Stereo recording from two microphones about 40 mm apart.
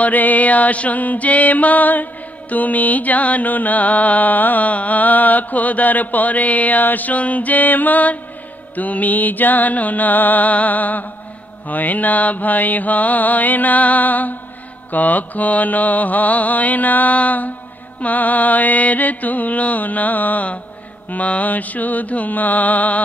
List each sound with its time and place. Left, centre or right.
0.0 s music: left
2.5 s mantra: left